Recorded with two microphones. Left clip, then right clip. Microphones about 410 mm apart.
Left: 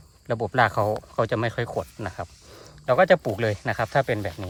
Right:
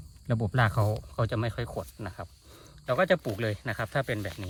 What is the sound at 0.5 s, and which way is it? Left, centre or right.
Speech, centre.